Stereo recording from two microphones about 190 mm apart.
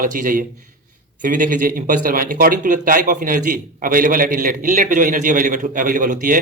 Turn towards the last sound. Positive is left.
turn(degrees=-45)  # may be behind; listen again after turning